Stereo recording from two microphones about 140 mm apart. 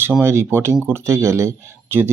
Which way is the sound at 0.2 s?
15° right (ahead or behind).